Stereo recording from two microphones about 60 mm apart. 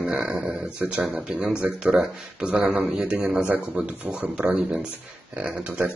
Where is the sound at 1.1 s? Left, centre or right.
Centre.